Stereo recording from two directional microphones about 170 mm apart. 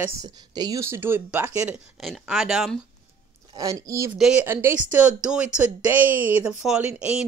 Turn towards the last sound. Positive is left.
turn(degrees=-5)  # may be behind; listen again after turning